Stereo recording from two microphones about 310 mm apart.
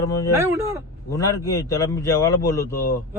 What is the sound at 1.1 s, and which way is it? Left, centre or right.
Speech, centre.